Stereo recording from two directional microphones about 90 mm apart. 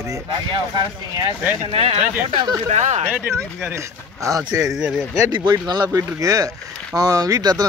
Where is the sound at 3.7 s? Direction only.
35° right (ahead or behind).